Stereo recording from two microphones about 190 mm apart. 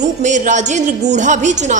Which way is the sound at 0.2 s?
40° right (ahead or behind).